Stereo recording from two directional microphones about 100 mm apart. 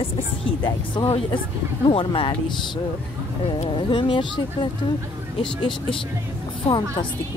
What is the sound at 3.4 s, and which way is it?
Speech, 70° left (ahead or behind).